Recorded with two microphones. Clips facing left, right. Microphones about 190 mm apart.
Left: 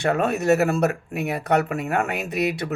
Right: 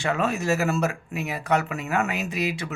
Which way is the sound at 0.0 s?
60° left (ahead or behind).